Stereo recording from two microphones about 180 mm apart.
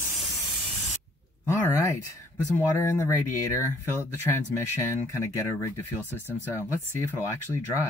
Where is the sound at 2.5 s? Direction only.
15° left (ahead or behind).